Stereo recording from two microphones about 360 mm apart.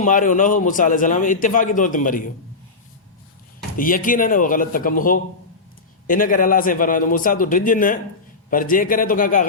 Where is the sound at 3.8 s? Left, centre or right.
Left.